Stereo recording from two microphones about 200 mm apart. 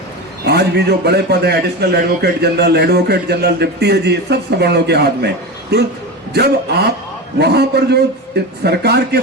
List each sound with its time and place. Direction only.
0.4 s a man's voice: 55° right (ahead or behind)